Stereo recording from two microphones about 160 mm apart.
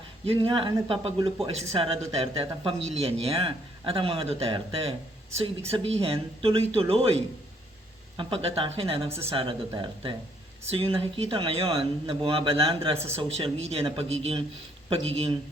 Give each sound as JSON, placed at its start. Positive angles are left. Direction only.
{"t": 0.3, "sound": "speech", "side_deg": -35}